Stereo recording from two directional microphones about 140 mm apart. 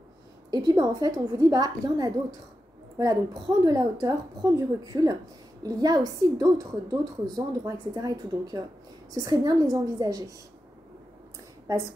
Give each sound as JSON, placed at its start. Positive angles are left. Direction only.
{"t": 0.5, "sound": "a woman's voice", "side_deg": -25}
{"t": 3.6, "sound": "a woman's voice", "side_deg": -25}